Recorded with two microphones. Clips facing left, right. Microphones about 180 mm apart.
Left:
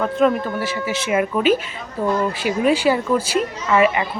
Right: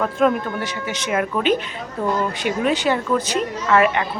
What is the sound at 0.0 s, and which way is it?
A woman's voice, centre (ahead or behind).